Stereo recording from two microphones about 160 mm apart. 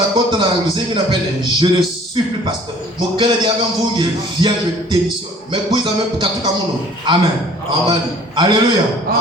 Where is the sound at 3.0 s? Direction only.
30° right (ahead or behind).